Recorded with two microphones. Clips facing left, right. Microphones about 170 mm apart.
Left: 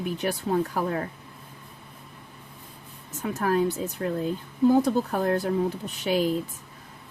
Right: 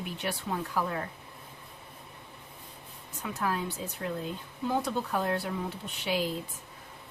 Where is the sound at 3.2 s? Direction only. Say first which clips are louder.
Left 8 dB; 45° left (ahead or behind).